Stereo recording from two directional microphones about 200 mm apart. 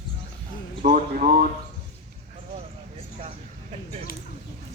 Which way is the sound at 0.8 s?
45° right (ahead or behind).